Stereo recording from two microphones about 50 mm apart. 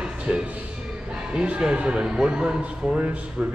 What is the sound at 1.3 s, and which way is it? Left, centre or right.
Speech, centre.